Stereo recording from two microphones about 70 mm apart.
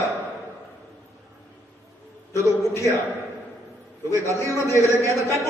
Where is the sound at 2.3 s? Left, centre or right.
Left.